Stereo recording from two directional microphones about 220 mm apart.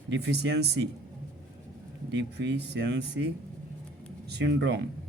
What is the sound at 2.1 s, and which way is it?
Speech, 50° right (ahead or behind).